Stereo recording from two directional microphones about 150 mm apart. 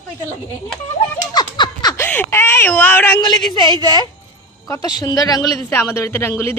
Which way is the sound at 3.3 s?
30° left (ahead or behind).